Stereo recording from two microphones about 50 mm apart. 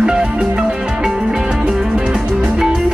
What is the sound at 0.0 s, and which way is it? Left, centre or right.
Music, centre.